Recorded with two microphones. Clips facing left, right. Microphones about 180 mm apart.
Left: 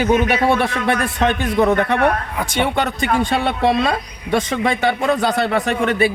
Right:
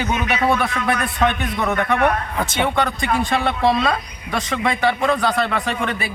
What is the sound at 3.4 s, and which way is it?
Speech, 25° left (ahead or behind).